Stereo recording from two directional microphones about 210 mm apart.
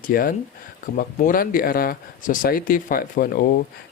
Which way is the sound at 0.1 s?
45° left (ahead or behind).